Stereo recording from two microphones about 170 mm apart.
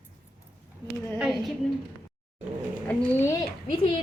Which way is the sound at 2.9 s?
10° left (ahead or behind).